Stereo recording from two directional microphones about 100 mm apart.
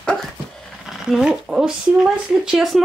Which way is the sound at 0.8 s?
5° right (ahead or behind).